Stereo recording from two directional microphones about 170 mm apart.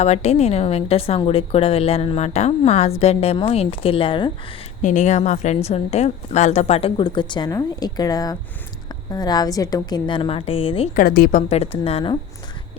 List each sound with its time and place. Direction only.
0.0 s a woman's voice: 40° left (ahead or behind)
4.8 s a woman's voice: 45° left (ahead or behind)
10.9 s a woman's voice: 55° left (ahead or behind); by 12.1 s 35° left (ahead or behind)